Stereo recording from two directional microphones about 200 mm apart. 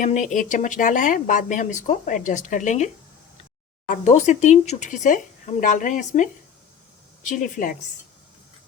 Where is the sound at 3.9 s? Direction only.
35° left (ahead or behind).